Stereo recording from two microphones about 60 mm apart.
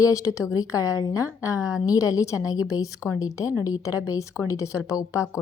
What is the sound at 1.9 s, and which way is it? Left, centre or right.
A woman's voice, left.